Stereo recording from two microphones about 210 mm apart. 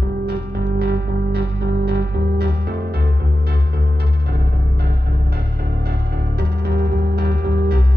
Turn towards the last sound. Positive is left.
turn(degrees=-50)  # may be behind; listen again after turning